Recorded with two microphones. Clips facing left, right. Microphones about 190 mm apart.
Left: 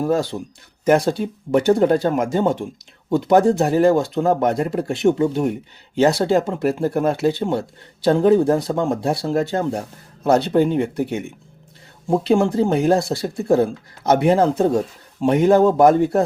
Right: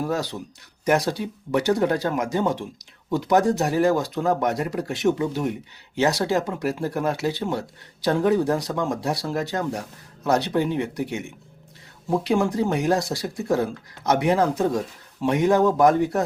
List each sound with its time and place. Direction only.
0.0 s speech: 25° left (ahead or behind)
12.0 s speech: 25° left (ahead or behind)